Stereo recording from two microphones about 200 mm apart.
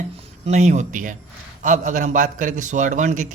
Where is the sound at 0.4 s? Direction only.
35° right (ahead or behind).